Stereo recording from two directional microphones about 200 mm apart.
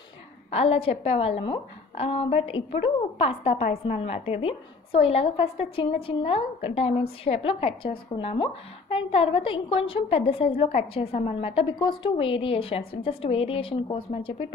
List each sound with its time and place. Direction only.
0.5 s a woman's voice: 30° left (ahead or behind)